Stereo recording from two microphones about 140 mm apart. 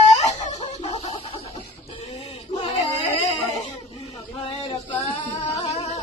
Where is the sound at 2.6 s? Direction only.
50° left (ahead or behind).